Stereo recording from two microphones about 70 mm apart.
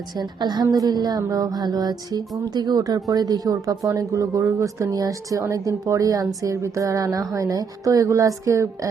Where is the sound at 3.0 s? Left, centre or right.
Right.